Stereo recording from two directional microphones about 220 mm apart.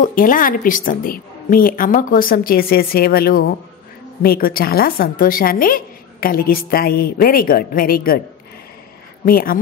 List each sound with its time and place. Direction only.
0.0 s a woman's voice: 40° left (ahead or behind)
9.2 s a woman's voice: 40° left (ahead or behind)